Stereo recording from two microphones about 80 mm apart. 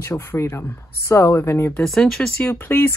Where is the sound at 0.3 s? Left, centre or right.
Left.